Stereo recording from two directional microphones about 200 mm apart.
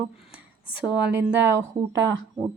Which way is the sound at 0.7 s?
10° right (ahead or behind).